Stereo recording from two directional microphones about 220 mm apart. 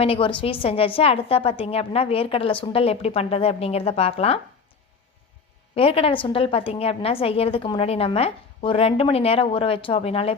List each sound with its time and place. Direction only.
0.0 s a woman's voice: 25° left (ahead or behind)
5.7 s a woman's voice: 25° left (ahead or behind)